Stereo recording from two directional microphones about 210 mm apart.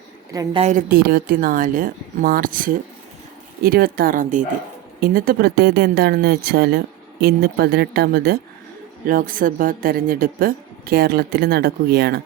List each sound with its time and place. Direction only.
0.3 s a woman's voice: 25° right (ahead or behind)
0.7 s speech: 40° right (ahead or behind)